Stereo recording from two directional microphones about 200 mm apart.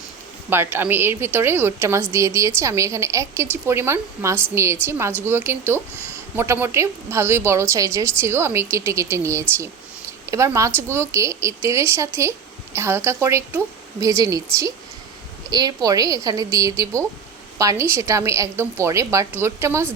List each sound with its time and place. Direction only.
0.5 s a woman's voice: 10° right (ahead or behind)